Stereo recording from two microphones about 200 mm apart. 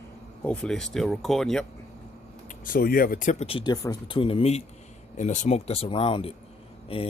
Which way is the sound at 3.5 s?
20° left (ahead or behind).